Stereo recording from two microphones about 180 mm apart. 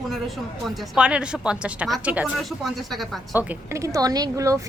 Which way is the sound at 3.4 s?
15° right (ahead or behind).